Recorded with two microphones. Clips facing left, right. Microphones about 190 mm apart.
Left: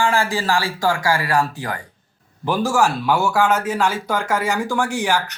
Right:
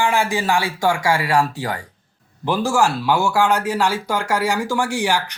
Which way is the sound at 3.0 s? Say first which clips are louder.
Even; 10° right (ahead or behind).